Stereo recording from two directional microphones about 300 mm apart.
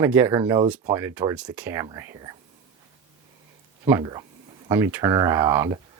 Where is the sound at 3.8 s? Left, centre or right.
Centre.